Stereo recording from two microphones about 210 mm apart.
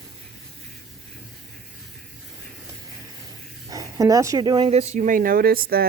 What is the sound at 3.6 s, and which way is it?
Speech, 15° right (ahead or behind).